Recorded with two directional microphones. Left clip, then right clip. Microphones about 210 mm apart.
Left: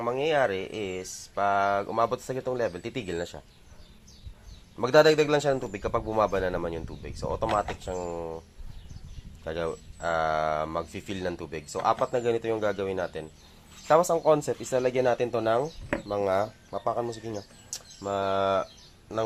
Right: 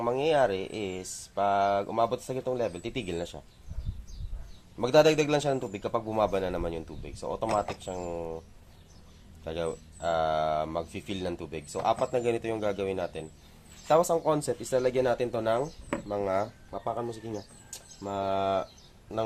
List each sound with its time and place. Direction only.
0.0 s a man's voice: centre (ahead or behind)
4.8 s a man's voice: 10° left (ahead or behind)
9.4 s a man's voice: 15° left (ahead or behind)